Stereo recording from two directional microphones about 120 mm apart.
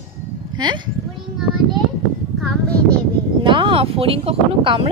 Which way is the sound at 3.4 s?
45° right (ahead or behind).